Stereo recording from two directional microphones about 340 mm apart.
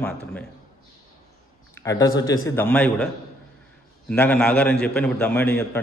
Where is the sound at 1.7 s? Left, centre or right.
Centre.